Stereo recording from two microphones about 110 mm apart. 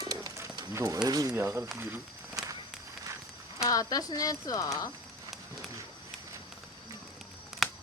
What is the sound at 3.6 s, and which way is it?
Speech, 35° left (ahead or behind).